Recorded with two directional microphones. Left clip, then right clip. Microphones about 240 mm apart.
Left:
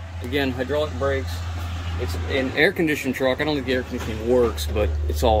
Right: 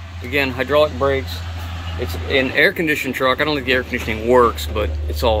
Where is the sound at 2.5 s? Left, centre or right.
Centre.